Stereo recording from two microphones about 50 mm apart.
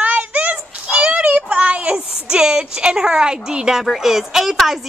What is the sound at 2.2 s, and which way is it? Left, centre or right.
Speech, centre.